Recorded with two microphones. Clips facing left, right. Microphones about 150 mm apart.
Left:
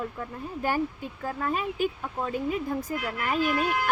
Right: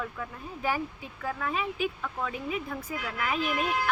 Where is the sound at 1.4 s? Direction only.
45° left (ahead or behind).